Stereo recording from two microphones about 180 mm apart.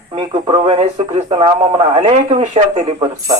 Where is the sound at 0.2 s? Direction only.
30° right (ahead or behind).